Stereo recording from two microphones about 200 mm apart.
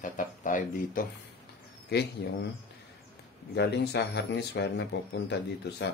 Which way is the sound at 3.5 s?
55° left (ahead or behind).